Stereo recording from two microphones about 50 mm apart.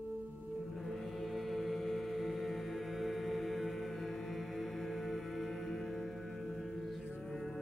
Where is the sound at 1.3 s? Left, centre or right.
Centre.